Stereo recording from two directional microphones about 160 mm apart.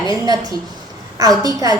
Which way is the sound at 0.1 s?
25° right (ahead or behind).